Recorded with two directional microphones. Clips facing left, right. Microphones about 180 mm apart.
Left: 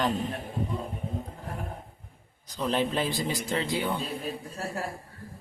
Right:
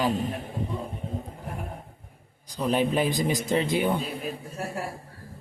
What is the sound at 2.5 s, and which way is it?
A man's voice, 10° right (ahead or behind).